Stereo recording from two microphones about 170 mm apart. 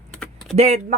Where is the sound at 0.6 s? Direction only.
40° right (ahead or behind).